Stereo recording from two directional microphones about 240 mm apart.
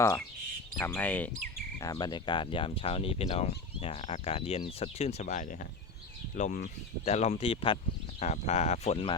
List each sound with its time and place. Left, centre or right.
0.0 s speech: centre